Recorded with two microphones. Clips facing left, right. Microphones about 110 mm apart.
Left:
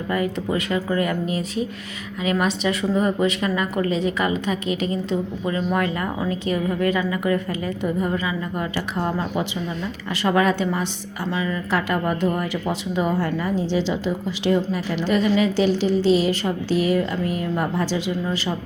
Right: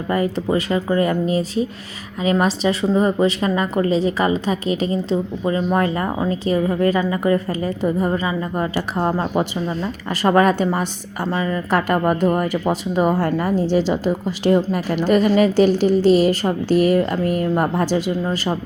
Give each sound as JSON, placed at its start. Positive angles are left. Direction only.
{"t": 0.1, "sound": "a woman's voice", "side_deg": -35}